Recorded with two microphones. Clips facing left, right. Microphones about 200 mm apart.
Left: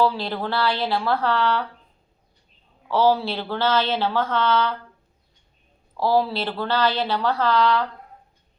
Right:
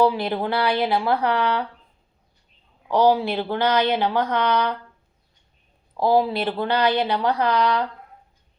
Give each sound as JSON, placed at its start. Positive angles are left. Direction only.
{"t": 0.0, "sound": "speech", "side_deg": -20}
{"t": 2.9, "sound": "speech", "side_deg": -15}
{"t": 6.0, "sound": "speech", "side_deg": -15}